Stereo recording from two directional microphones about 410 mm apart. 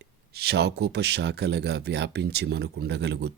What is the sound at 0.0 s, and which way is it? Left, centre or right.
Speech, right.